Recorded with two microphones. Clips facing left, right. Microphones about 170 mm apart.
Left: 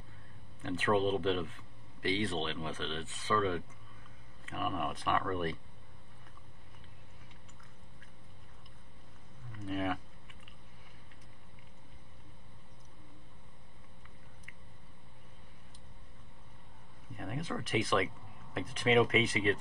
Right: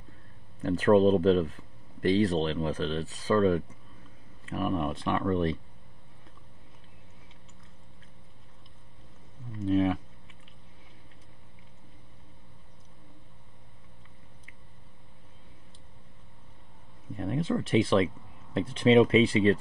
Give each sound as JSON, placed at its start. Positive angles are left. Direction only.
{"t": 0.6, "sound": "speech", "side_deg": -40}
{"t": 9.5, "sound": "speech", "side_deg": -25}
{"t": 17.2, "sound": "speech", "side_deg": -30}